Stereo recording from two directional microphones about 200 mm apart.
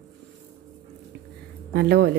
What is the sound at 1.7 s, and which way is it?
Speech, 55° right (ahead or behind).